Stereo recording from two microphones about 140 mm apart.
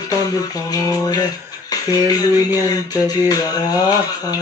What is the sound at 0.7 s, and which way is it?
Music, 30° left (ahead or behind).